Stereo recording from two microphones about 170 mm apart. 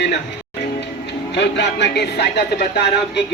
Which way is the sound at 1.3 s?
90° left.